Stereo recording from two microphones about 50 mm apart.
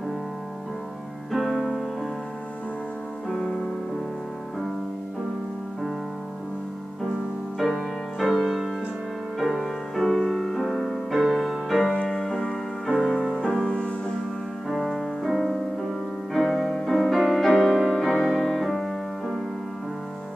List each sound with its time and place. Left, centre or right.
1.3 s music: centre
3.3 s keyboard: centre
7.5 s music: centre
11.9 s music: centre
14.7 s music: centre